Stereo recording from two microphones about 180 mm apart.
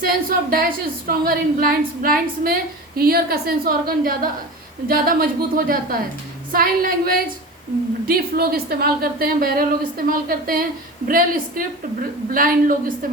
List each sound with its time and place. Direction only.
0.0 s a woman's voice: 55° right (ahead or behind)